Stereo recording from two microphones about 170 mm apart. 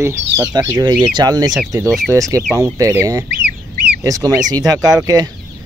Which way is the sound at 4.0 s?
20° right (ahead or behind).